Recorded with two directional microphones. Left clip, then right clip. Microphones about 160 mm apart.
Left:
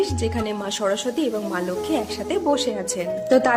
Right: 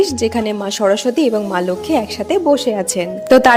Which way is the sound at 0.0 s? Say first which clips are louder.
Right 8 dB; 45° right (ahead or behind).